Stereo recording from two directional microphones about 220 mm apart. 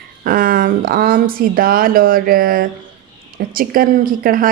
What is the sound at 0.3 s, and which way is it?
Speech, 40° right (ahead or behind).